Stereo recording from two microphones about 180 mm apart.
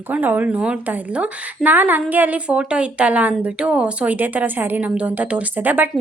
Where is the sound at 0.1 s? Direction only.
10° right (ahead or behind).